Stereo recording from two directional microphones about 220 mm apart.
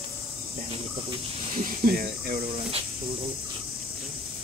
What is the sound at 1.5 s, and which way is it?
Speech, 40° right (ahead or behind).